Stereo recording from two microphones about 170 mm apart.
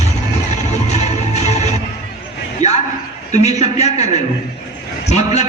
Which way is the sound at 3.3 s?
40° left (ahead or behind).